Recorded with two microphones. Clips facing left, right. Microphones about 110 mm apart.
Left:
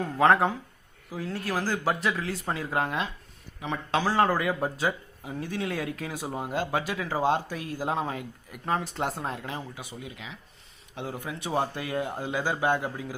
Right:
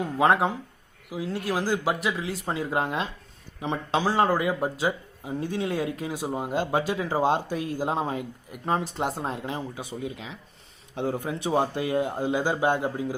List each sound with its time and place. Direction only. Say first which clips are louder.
0.0 s speech: even; 15° right (ahead or behind)